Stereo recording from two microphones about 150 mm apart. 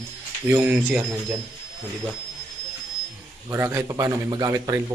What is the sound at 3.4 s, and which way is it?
A man's voice, 15° right (ahead or behind).